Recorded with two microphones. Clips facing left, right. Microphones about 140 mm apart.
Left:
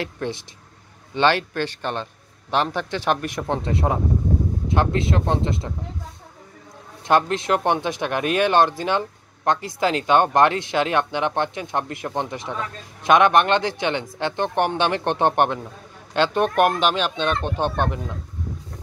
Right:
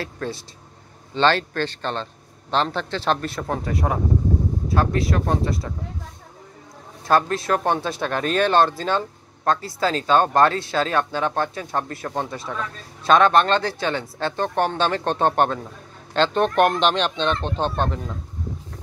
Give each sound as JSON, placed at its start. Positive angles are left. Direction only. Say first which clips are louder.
{"t": 0.0, "sound": "speech", "louder": "left 2 dB", "side_deg": 20}
{"t": 7.1, "sound": "speech", "louder": "left 1 dB", "side_deg": 20}